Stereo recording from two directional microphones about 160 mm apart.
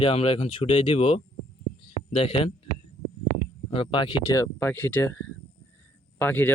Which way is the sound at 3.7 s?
35° left (ahead or behind).